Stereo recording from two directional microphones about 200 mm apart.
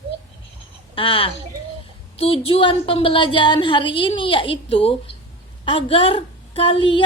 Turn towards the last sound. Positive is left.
turn(degrees=25)  # may be behind; listen again after turning